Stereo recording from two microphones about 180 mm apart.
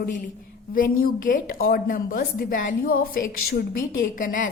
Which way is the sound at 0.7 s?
50° left (ahead or behind).